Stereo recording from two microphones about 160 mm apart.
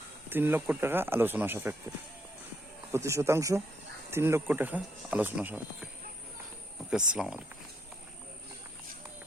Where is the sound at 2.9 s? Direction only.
20° right (ahead or behind).